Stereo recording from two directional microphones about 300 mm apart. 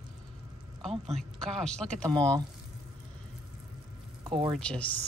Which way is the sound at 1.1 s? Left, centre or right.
Centre.